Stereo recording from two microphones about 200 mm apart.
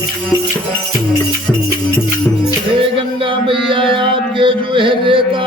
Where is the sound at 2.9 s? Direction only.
25° right (ahead or behind).